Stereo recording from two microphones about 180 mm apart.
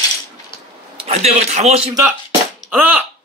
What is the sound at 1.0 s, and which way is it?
Speech, 35° right (ahead or behind).